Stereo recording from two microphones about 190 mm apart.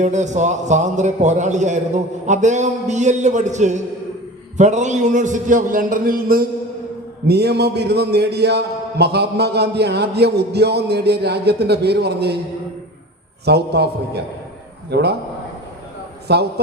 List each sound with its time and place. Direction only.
0.0 s a man's voice: 40° right (ahead or behind); by 12.4 s 60° right (ahead or behind)
13.4 s a man's voice: 60° right (ahead or behind)
16.2 s a man's voice: 60° right (ahead or behind)